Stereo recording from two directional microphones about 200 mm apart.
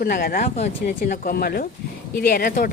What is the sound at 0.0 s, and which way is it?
Speech, 45° left (ahead or behind).